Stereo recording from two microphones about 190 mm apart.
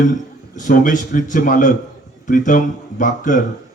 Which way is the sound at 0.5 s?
45° left (ahead or behind).